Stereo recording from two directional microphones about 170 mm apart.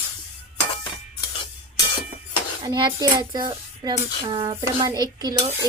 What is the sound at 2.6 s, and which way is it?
Speech, 30° right (ahead or behind).